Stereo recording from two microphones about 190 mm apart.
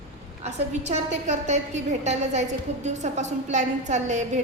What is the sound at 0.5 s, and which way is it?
A woman's voice, 35° right (ahead or behind).